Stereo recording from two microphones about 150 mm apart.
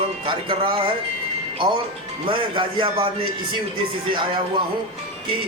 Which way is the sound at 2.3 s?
35° right (ahead or behind).